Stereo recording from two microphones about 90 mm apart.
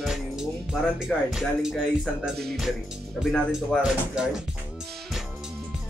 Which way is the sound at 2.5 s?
5° right (ahead or behind).